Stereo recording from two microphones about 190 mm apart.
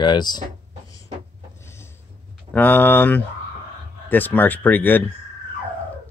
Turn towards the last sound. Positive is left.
turn(degrees=10)  # may be behind; listen again after turning